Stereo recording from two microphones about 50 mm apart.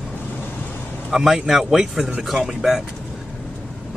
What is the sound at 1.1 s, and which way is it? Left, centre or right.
A man's voice, centre.